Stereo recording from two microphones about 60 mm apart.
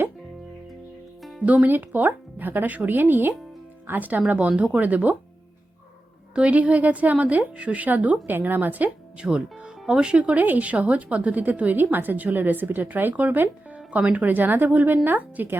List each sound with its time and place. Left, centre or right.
1.2 s music: centre
1.5 s speech: right
6.3 s speech: right
9.2 s speech: centre; by 13.7 s right
13.7 s speech: right